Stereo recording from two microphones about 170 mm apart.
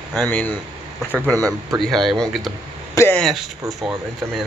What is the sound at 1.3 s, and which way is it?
Speech, 20° right (ahead or behind).